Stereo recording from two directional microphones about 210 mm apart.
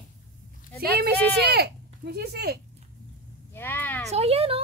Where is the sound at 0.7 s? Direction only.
45° right (ahead or behind).